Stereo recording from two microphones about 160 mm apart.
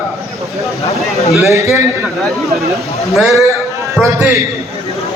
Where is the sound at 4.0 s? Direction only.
15° right (ahead or behind).